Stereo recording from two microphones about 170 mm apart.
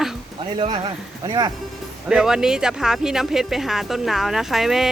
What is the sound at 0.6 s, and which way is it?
Speech, 25° right (ahead or behind).